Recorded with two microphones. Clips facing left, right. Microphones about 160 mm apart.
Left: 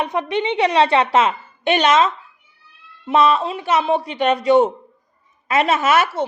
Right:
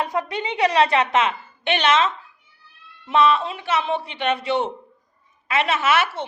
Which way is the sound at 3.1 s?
40° left (ahead or behind).